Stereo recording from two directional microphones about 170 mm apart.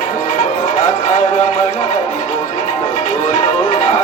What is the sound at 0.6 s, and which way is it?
Music, 40° left (ahead or behind).